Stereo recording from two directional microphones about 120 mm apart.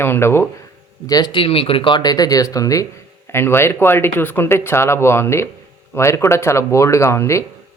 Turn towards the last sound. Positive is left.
turn(degrees=25)  # may be behind; listen again after turning